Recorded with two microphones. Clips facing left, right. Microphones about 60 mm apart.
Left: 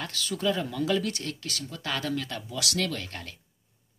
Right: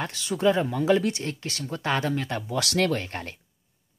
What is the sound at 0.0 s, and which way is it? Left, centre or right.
Speech, right.